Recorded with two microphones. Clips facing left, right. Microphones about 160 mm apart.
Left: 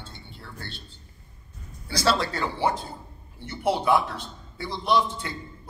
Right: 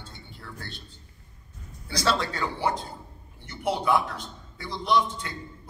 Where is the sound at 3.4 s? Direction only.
30° left (ahead or behind).